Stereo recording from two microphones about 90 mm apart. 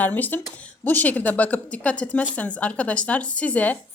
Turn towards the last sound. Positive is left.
turn(degrees=15)  # may be behind; listen again after turning